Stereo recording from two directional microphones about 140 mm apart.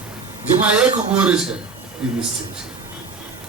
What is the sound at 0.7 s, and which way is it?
A man's voice, 10° right (ahead or behind).